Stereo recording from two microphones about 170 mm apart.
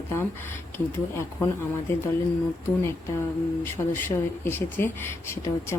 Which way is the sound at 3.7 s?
15° left (ahead or behind).